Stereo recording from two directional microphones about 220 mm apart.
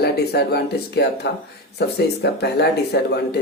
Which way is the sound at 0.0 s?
45° left (ahead or behind).